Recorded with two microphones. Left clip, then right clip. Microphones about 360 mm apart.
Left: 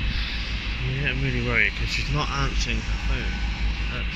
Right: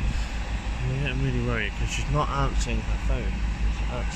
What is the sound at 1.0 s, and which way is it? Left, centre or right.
Speech, centre.